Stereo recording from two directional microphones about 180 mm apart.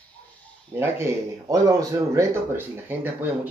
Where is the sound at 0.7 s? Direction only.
15° right (ahead or behind).